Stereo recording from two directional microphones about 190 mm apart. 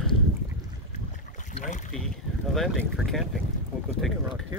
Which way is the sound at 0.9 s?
40° left (ahead or behind).